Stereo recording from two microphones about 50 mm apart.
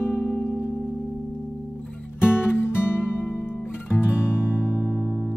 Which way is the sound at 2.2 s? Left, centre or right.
Left.